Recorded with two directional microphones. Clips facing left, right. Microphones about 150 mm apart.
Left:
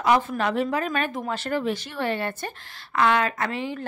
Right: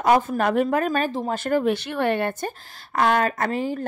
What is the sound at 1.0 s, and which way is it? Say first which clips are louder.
Speech: right 3 dB; 30° right (ahead or behind).